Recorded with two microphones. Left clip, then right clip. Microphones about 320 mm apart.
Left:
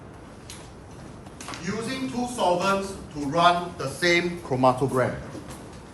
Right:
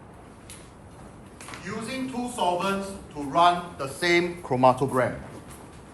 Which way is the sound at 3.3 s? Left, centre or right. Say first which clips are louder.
Even; centre.